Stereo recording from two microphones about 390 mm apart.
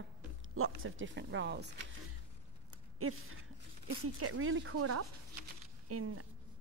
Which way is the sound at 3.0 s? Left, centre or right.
Right.